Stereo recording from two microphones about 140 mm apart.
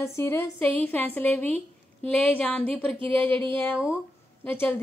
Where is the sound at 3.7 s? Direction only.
5° right (ahead or behind).